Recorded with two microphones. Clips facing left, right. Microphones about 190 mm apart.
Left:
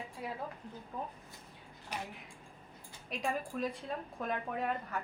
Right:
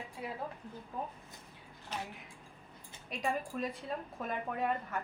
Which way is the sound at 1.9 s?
10° left (ahead or behind).